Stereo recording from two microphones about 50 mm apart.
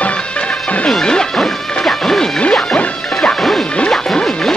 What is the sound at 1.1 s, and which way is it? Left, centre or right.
Music, centre.